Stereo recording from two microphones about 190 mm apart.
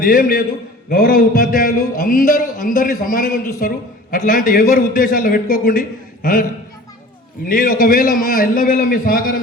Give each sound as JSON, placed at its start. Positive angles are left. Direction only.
{"t": 0.0, "sound": "a man's voice", "side_deg": 45}
{"t": 7.4, "sound": "a man's voice", "side_deg": 45}